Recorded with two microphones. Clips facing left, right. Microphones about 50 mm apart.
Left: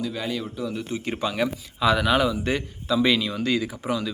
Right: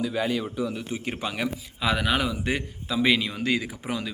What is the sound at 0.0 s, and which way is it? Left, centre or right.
A man's voice, centre.